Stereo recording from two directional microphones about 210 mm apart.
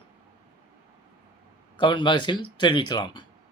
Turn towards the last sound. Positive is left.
turn(degrees=20)  # may be behind; listen again after turning